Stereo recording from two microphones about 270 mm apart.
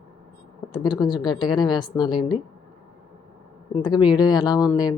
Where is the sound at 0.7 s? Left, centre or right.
Centre.